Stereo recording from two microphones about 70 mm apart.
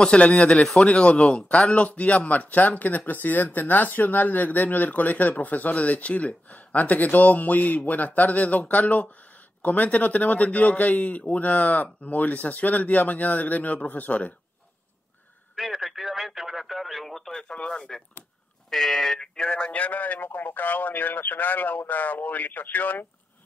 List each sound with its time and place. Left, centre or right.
0.0 s speech: centre
15.5 s a sound: centre
18.7 s speech: centre; by 23.0 s left